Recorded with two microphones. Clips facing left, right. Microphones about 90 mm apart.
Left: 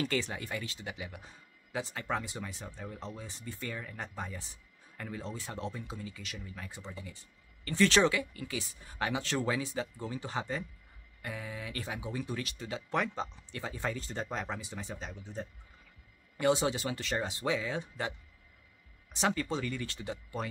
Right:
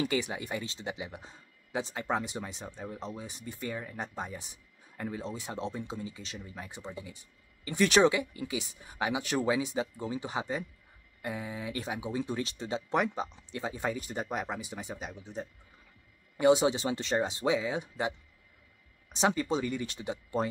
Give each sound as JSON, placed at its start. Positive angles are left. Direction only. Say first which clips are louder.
{"t": 0.0, "sound": "speech", "louder": "right 2 dB", "side_deg": -15}
{"t": 19.1, "sound": "speech", "louder": "right 4 dB", "side_deg": -20}